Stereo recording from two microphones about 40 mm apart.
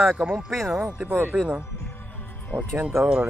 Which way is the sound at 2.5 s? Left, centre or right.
Right.